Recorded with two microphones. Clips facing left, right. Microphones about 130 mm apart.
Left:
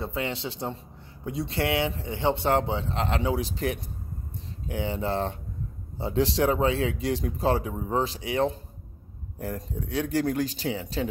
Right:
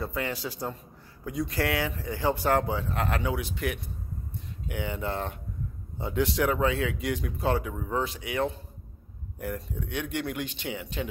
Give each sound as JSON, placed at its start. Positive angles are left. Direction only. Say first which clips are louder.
{"t": 0.0, "sound": "a man's voice", "louder": "left 1 dB", "side_deg": 25}